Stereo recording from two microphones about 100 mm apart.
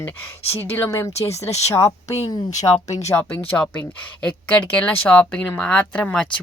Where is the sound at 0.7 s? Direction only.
20° left (ahead or behind).